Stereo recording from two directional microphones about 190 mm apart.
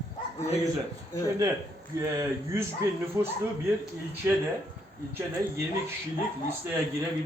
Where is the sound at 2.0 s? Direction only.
15° right (ahead or behind).